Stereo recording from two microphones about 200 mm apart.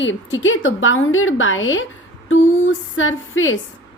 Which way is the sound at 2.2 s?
80° left.